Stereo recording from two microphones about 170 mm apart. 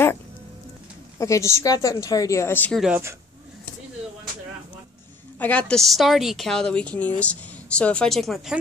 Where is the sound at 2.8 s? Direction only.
10° right (ahead or behind).